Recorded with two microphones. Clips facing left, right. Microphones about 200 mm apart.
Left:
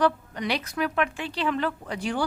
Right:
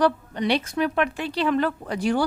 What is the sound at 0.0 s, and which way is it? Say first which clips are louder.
A woman's voice: right 3 dB; 30° right (ahead or behind).